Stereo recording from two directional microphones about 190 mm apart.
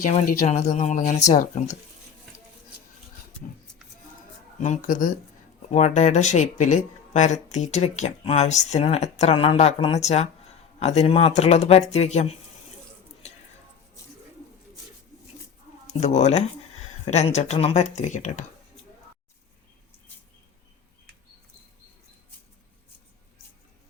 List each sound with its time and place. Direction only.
0.0 s speech: 40° left (ahead or behind)
4.6 s speech: 40° left (ahead or behind)
15.9 s speech: 35° left (ahead or behind)